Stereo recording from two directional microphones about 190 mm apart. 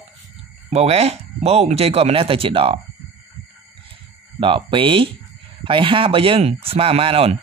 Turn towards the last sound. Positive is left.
turn(degrees=-30)  # may be behind; listen again after turning